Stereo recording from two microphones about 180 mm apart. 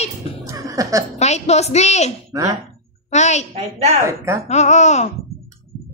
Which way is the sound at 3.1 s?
40° left (ahead or behind).